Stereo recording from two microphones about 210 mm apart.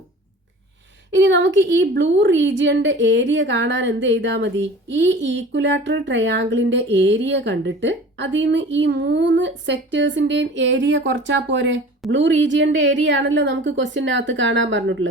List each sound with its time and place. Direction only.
1.1 s a woman's voice: 60° right (ahead or behind)